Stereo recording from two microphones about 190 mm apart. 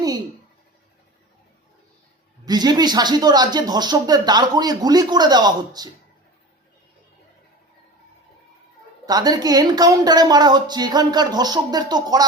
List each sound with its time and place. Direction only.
2.4 s speech: 20° right (ahead or behind)
9.0 s speech: 20° right (ahead or behind)